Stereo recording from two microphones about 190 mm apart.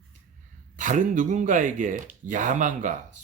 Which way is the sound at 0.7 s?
40° right (ahead or behind).